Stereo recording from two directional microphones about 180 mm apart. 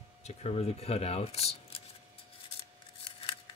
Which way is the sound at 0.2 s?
35° left (ahead or behind).